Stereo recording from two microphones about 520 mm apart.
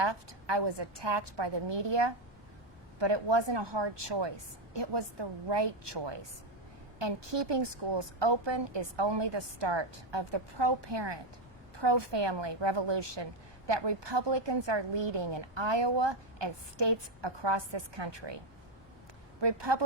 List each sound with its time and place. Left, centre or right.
0.0 s a woman's voice: right
19.4 s a woman's voice: right